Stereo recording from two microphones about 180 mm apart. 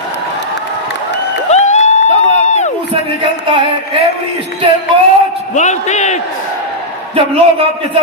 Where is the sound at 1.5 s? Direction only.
40° left (ahead or behind).